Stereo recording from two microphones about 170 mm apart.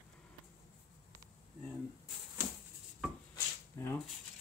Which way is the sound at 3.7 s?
15° left (ahead or behind).